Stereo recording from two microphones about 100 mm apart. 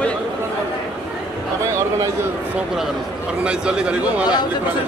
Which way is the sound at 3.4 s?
10° right (ahead or behind).